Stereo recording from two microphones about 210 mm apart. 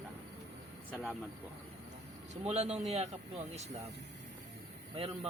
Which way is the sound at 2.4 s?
30° right (ahead or behind).